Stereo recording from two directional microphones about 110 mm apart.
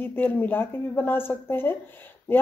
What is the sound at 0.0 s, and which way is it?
Speech, 15° left (ahead or behind).